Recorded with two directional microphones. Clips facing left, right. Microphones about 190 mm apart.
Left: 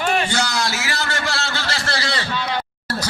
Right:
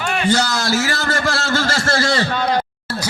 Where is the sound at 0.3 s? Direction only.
35° right (ahead or behind).